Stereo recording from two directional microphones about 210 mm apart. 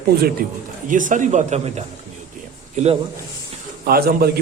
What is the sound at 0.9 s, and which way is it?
Speech, 40° right (ahead or behind).